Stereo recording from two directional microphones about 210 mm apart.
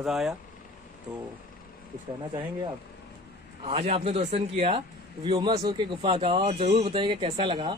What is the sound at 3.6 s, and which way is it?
A man's voice, 30° right (ahead or behind).